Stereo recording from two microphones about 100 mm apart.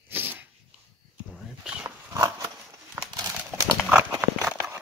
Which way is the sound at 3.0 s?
30° right (ahead or behind).